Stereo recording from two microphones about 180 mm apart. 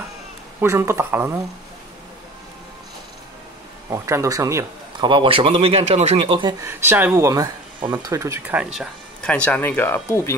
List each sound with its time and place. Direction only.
0.6 s speech: 15° right (ahead or behind)
3.9 s a man's voice: 15° right (ahead or behind)
5.1 s speech: 30° right (ahead or behind)
6.6 s speech: 15° right (ahead or behind)
9.2 s speech: 5° left (ahead or behind)